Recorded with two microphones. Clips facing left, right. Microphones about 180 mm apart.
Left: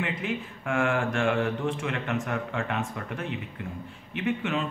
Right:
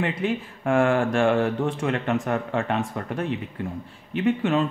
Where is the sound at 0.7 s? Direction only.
35° right (ahead or behind).